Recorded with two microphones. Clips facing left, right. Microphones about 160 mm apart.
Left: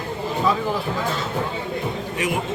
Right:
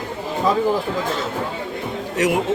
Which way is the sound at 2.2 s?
75° right (ahead or behind).